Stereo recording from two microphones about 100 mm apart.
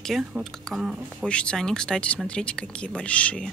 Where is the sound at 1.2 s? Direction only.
10° left (ahead or behind).